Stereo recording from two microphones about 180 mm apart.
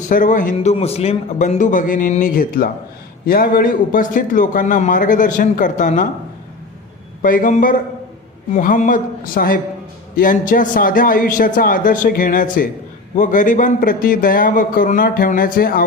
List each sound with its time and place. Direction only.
0.1 s a man's voice: 45° left (ahead or behind)
7.2 s a man's voice: 50° left (ahead or behind)